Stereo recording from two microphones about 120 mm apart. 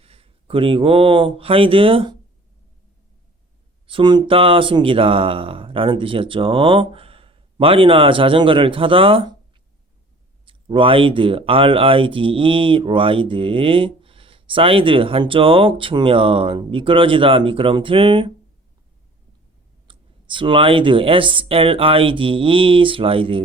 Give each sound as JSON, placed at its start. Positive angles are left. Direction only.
{"t": 0.0, "sound": "speech", "side_deg": -50}
{"t": 3.8, "sound": "speech", "side_deg": -45}
{"t": 10.4, "sound": "speech", "side_deg": -45}
{"t": 19.9, "sound": "speech", "side_deg": -45}